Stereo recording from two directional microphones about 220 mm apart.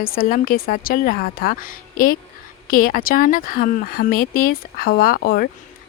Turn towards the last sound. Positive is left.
turn(degrees=45)  # may be behind; listen again after turning